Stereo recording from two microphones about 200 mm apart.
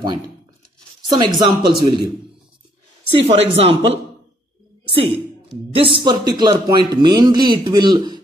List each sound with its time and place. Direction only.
1.0 s a man's voice: 20° right (ahead or behind)
3.1 s a man's voice: 30° right (ahead or behind)
5.7 s a man's voice: 25° right (ahead or behind)